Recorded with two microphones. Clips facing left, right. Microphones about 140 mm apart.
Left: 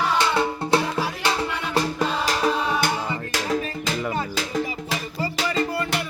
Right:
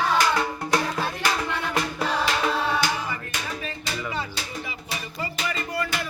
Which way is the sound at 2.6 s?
20° left (ahead or behind).